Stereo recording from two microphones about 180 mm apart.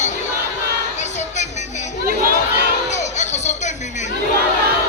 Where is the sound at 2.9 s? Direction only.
40° left (ahead or behind).